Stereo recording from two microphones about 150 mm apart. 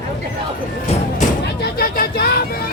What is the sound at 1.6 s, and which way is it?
Vehicle, 85° left.